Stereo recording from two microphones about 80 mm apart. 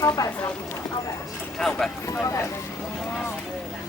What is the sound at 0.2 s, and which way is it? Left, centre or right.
Speech, left.